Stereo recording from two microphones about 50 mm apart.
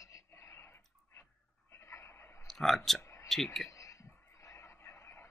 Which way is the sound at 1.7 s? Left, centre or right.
Left.